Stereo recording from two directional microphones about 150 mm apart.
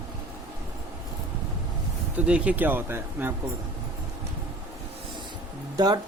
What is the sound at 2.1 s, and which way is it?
Speech, 10° right (ahead or behind).